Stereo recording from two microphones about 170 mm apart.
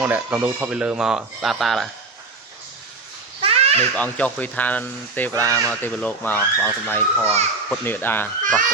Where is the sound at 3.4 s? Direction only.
35° right (ahead or behind).